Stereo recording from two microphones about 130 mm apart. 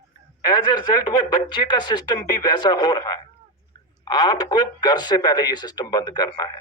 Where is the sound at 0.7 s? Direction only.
35° left (ahead or behind).